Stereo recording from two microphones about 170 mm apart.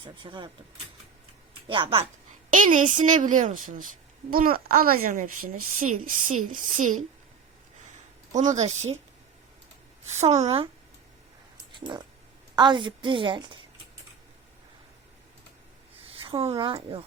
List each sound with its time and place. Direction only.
0.0 s a woman's voice: 30° right (ahead or behind)
1.6 s a woman's voice: 30° right (ahead or behind)
2.5 s a woman's voice: 50° right (ahead or behind)
8.3 s a woman's voice: 45° right (ahead or behind)
10.2 s a woman's voice: 40° right (ahead or behind)
12.5 s a woman's voice: 25° right (ahead or behind)
16.2 s a sound: 30° right (ahead or behind)
16.6 s a woman's voice: 30° right (ahead or behind)